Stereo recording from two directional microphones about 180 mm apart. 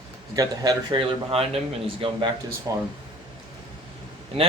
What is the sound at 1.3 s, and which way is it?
Speech, 35° right (ahead or behind).